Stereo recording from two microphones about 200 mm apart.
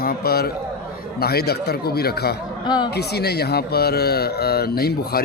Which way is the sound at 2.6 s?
20° left (ahead or behind).